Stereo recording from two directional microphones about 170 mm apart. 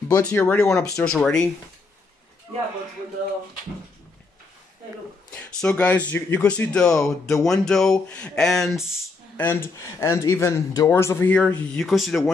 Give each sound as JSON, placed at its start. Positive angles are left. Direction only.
{"t": 0.1, "sound": "speech", "side_deg": 10}
{"t": 5.3, "sound": "speech", "side_deg": 5}
{"t": 9.4, "sound": "speech", "side_deg": 15}